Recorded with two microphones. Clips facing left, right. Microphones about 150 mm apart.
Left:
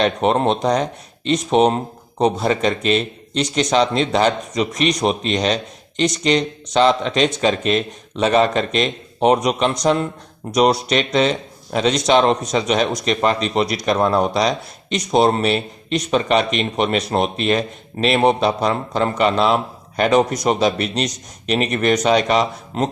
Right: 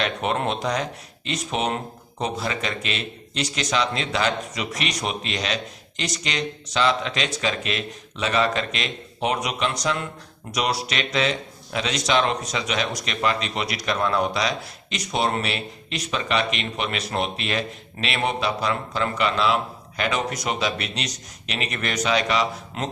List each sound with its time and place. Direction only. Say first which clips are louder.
0.0 s speech: left 8 dB; 35° left (ahead or behind)